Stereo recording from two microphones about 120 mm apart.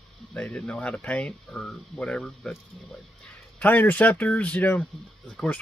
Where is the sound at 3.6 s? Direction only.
15° left (ahead or behind).